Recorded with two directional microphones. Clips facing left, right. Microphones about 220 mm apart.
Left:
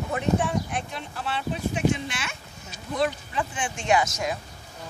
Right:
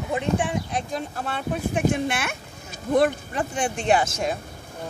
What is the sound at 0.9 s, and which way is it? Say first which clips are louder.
Speech: right 3 dB; 45° right (ahead or behind).